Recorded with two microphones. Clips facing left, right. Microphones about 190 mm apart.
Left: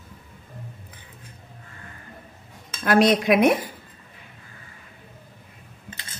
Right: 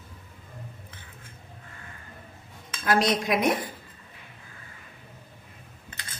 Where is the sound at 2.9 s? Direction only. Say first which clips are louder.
Left 6 dB; 60° left (ahead or behind).